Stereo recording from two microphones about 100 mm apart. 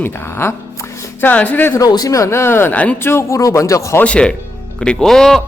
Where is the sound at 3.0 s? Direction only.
25° left (ahead or behind).